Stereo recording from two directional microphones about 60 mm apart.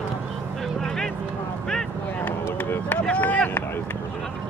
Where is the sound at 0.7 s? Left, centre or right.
Centre.